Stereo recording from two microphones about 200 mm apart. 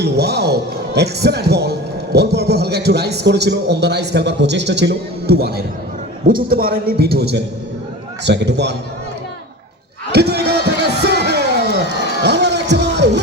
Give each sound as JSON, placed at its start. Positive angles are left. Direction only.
{"t": 0.0, "sound": "a man's voice", "side_deg": -55}
{"t": 10.1, "sound": "speech", "side_deg": -55}
{"t": 11.0, "sound": "a sound", "side_deg": -55}